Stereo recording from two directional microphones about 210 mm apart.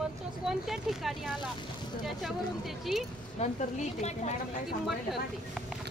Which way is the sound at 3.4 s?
30° left (ahead or behind).